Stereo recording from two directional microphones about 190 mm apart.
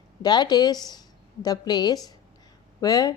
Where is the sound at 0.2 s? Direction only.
20° left (ahead or behind).